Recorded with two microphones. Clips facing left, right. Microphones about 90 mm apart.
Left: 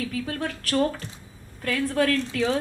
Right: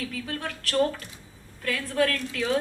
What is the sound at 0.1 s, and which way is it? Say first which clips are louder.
A woman's voice: left 4 dB; 45° left (ahead or behind).